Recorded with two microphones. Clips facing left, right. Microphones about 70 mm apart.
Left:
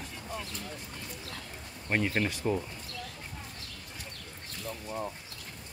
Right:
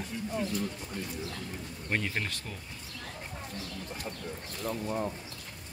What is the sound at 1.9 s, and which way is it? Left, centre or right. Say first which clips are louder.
Speech: left 3 dB; centre.